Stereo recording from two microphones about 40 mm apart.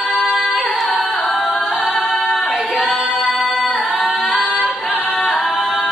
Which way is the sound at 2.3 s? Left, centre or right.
Centre.